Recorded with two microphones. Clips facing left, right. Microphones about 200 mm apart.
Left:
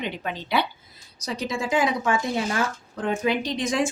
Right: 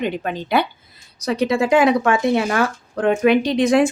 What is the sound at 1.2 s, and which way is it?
Speech, 65° right (ahead or behind).